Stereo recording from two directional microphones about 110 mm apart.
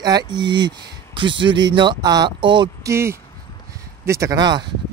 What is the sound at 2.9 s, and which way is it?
Speech, 25° right (ahead or behind).